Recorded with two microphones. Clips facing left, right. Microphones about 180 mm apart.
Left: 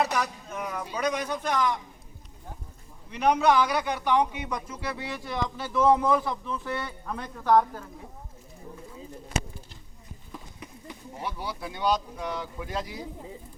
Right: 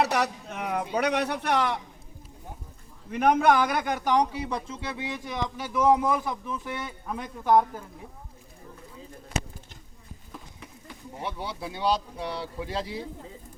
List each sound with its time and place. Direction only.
0.0 s a man's voice: 70° right (ahead or behind)
3.1 s a man's voice: 50° right (ahead or behind); by 7.9 s 15° right (ahead or behind)
11.2 s a man's voice: 25° right (ahead or behind)